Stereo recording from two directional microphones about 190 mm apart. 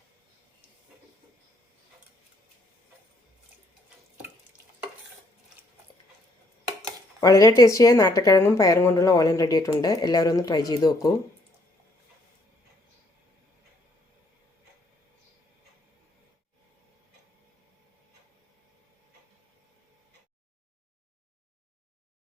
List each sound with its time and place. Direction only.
7.2 s a woman's voice: 20° left (ahead or behind)